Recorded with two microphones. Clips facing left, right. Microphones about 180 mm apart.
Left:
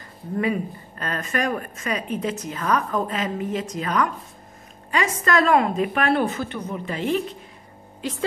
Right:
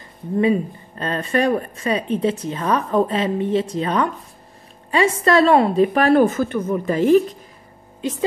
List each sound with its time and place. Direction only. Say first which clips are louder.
0.4 s a woman's voice: right 6 dB; 25° right (ahead or behind); by 7.2 s 45° right (ahead or behind)
8.0 s a woman's voice: right 5 dB; 20° right (ahead or behind)